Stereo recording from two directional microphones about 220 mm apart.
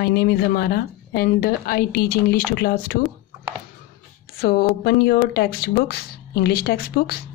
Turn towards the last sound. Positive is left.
turn(degrees=45)  # may be behind; listen again after turning